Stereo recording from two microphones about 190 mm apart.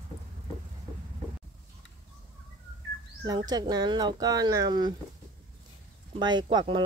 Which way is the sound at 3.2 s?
20° right (ahead or behind).